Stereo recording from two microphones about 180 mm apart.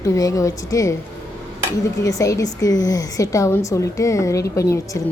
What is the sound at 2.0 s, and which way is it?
A woman's voice, 20° left (ahead or behind).